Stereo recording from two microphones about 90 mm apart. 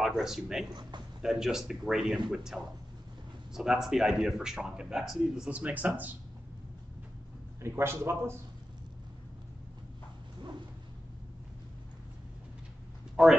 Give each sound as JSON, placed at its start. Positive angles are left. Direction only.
{"t": 0.0, "sound": "speech", "side_deg": -5}
{"t": 7.6, "sound": "a man's voice", "side_deg": -30}
{"t": 13.1, "sound": "speech", "side_deg": -5}